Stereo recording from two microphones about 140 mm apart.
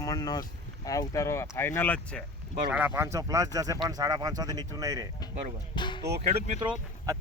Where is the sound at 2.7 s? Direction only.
10° right (ahead or behind).